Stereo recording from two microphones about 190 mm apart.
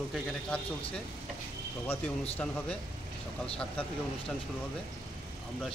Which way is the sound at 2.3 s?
5° left (ahead or behind).